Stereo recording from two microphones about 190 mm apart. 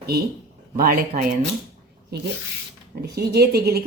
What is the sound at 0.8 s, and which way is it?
Speech, 50° right (ahead or behind).